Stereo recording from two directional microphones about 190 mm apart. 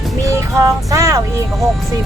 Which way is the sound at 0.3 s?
15° right (ahead or behind).